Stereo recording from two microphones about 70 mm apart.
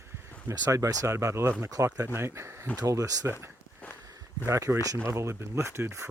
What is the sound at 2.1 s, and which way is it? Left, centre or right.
Speech, right.